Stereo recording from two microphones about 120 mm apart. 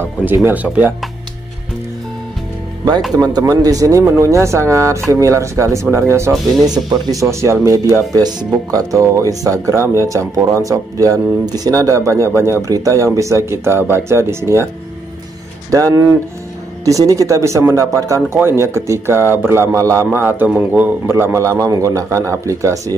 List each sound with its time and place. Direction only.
0.0 s speech: 15° right (ahead or behind)
3.2 s speech: 30° right (ahead or behind)
6.6 s speech: 35° right (ahead or behind)
8.1 s speech: 35° right (ahead or behind)
15.7 s speech: 30° right (ahead or behind)